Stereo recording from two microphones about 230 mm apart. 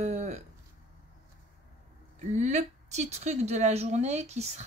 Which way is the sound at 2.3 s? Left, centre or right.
Right.